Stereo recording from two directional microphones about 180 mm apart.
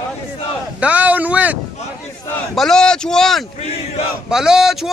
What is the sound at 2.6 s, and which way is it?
Speech, 5° left (ahead or behind).